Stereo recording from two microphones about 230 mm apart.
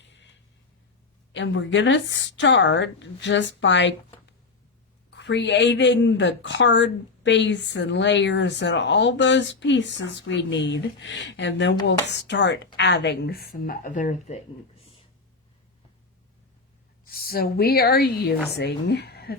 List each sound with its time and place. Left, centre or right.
1.3 s a woman's voice: left
17.2 s a woman's voice: left